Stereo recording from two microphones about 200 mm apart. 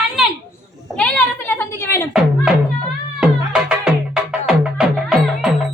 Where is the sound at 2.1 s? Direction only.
5° right (ahead or behind).